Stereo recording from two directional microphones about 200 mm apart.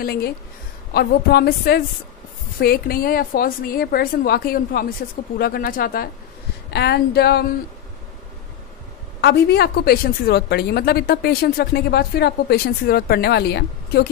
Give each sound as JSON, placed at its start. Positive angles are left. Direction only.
{"t": 0.0, "sound": "a woman's voice", "side_deg": 50}
{"t": 9.2, "sound": "a woman's voice", "side_deg": 55}